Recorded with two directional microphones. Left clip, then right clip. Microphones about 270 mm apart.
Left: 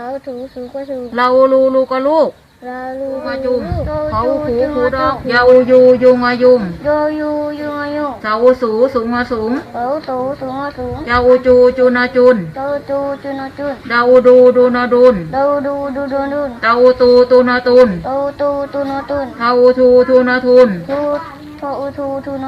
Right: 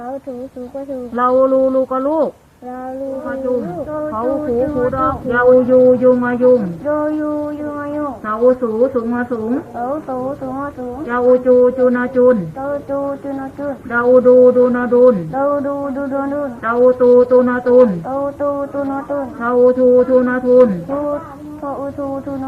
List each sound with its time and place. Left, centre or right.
1.1 s speech: centre
4.2 s speech: centre
6.8 s a sound: left
8.3 s speech: centre
9.8 s a sound: left
11.1 s speech: centre
13.9 s speech: centre
15.4 s a sound: left
16.6 s speech: centre
19.4 s speech: centre